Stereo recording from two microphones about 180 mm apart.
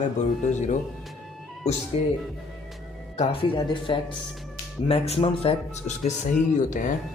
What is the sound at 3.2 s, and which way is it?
Speech, 30° left (ahead or behind).